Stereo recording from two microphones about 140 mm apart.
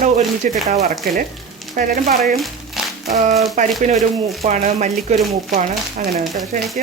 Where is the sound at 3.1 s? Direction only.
60° right (ahead or behind).